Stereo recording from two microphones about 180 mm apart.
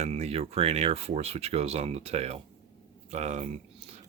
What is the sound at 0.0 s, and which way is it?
Speech, 35° right (ahead or behind).